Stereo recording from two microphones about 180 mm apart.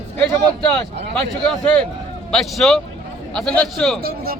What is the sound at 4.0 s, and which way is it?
Speech, 55° right (ahead or behind).